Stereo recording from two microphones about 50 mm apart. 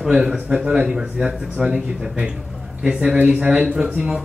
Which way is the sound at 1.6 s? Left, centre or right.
Centre.